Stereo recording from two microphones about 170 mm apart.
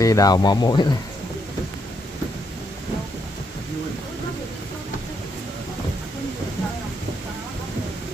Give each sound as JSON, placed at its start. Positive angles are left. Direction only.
{"t": 0.0, "sound": "speech", "side_deg": 20}